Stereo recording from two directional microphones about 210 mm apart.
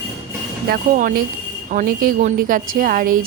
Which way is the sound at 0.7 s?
45° right (ahead or behind).